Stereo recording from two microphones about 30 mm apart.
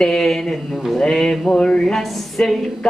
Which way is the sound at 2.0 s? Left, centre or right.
Centre.